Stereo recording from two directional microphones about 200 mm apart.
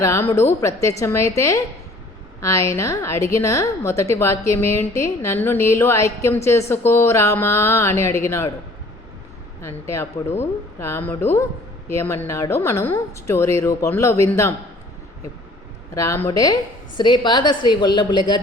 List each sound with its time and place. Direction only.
0.0 s speech: 15° left (ahead or behind)
9.6 s speech: 15° left (ahead or behind)
16.0 s a woman's voice: 15° left (ahead or behind)